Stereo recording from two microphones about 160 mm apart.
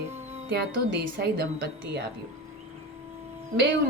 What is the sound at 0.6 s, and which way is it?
A woman's voice, 90° right.